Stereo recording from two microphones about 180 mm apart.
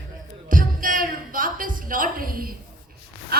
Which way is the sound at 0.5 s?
50° right (ahead or behind).